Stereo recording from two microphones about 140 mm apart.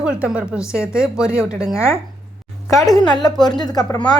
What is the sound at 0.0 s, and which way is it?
A woman's voice, 10° right (ahead or behind).